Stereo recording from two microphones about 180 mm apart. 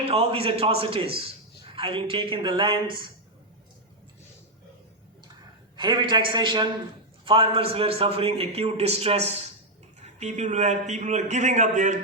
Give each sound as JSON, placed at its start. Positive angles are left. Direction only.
{"t": 0.1, "sound": "a man's voice", "side_deg": -35}
{"t": 5.7, "sound": "a man's voice", "side_deg": -25}